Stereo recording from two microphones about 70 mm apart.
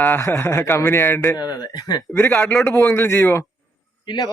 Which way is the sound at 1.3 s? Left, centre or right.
Left.